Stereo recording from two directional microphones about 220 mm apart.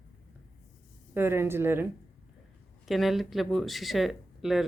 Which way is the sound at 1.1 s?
10° right (ahead or behind).